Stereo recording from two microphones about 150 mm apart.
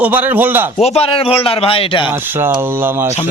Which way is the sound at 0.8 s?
45° left (ahead or behind).